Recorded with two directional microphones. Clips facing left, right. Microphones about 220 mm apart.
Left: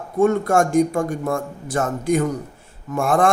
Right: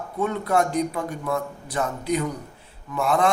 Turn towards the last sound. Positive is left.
turn(degrees=50)  # may be behind; listen again after turning